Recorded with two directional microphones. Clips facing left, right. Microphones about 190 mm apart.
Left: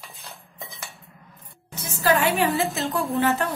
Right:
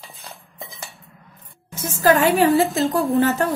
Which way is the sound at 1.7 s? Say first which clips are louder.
Right 5 dB; 45° right (ahead or behind).